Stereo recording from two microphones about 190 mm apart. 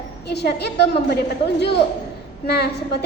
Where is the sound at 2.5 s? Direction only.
60° left (ahead or behind).